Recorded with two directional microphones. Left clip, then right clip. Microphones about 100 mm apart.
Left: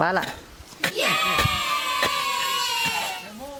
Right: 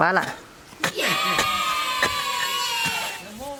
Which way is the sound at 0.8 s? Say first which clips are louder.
Even; centre (ahead or behind).